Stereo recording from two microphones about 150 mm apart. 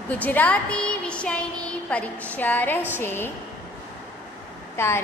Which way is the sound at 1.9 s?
10° left (ahead or behind).